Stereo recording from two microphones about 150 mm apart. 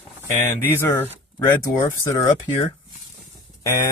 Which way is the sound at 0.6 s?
15° left (ahead or behind).